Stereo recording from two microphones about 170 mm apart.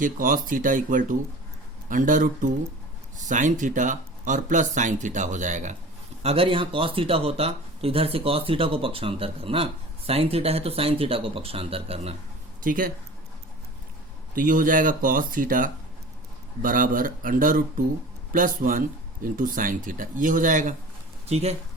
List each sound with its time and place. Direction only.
0.0 s speech: 50° right (ahead or behind)
6.2 s speech: 35° right (ahead or behind)
12.6 s speech: 55° right (ahead or behind)
14.3 s speech: 55° right (ahead or behind)
21.2 s speech: 40° right (ahead or behind)